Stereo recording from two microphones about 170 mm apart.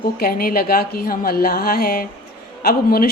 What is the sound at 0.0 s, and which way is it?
A woman's voice, 60° left (ahead or behind).